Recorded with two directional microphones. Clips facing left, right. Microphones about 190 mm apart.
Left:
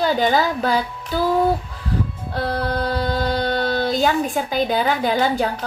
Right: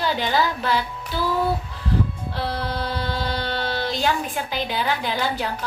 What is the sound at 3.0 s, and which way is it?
Speech, 45° left (ahead or behind).